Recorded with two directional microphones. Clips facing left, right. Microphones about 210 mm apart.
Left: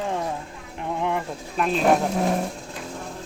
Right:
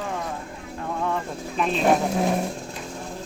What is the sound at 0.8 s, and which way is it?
Vehicle, 20° left (ahead or behind).